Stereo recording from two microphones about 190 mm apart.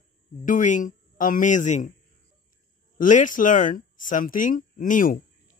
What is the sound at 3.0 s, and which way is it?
Speech, 40° left (ahead or behind).